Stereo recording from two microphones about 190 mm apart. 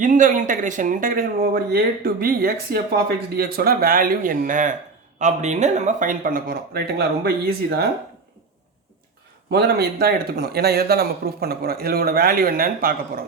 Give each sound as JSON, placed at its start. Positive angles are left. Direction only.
{"t": 0.0, "sound": "speech", "side_deg": -45}
{"t": 9.5, "sound": "speech", "side_deg": -55}